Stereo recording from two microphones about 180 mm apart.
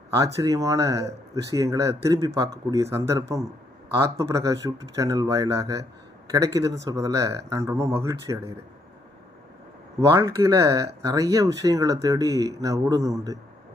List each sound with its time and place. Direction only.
0.3 s speech: 20° right (ahead or behind)
10.2 s speech: 15° right (ahead or behind)